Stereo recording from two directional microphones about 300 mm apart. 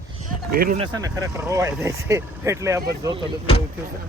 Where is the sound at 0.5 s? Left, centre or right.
Right.